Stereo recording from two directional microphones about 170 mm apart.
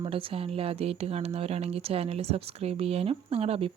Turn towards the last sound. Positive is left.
turn(degrees=-35)  # may be behind; listen again after turning